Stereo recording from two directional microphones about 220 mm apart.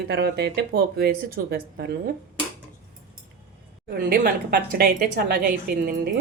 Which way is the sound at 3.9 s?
40° right (ahead or behind).